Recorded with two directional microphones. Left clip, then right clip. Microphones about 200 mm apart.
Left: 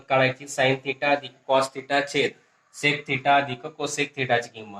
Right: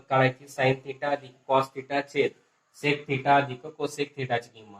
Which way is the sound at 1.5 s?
45° left (ahead or behind).